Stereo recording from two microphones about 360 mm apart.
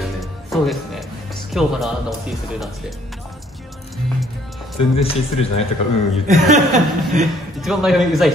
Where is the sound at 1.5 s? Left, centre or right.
Centre.